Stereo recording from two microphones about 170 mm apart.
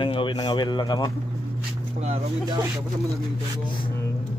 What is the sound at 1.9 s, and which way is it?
Speech, 40° right (ahead or behind).